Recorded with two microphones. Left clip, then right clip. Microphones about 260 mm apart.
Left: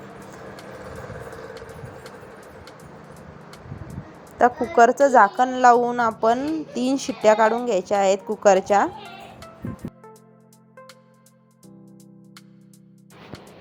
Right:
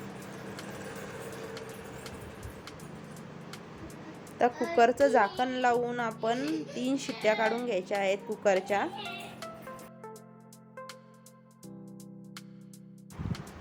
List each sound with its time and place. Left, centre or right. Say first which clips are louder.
1.5 s vehicle: left 4 dB; centre
4.4 s a woman's voice: left 9 dB; centre
9.0 s music: left 1 dB; centre